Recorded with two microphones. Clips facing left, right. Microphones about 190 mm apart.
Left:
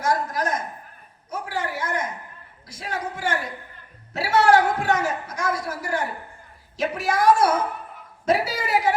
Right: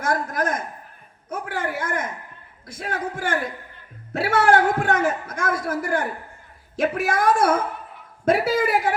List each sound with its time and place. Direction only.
0.0 s a man's voice: 55° right (ahead or behind)